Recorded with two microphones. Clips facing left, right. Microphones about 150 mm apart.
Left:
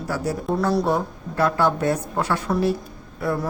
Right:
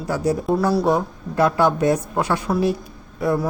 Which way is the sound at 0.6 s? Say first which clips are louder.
Left 1 dB; 5° right (ahead or behind).